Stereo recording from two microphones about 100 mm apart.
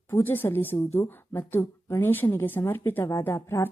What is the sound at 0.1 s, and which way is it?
A woman's voice, 20° left (ahead or behind).